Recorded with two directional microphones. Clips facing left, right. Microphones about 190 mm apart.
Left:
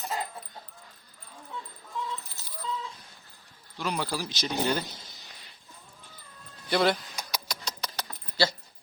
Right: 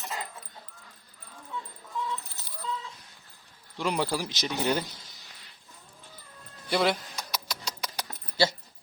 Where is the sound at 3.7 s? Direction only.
15° right (ahead or behind).